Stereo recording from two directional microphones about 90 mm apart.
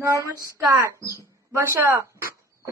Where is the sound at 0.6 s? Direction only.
40° right (ahead or behind).